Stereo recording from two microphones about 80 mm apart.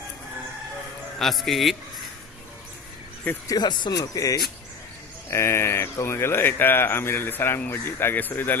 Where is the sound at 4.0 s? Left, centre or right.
Left.